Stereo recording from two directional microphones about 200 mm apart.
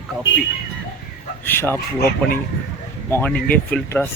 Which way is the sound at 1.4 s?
10° left (ahead or behind).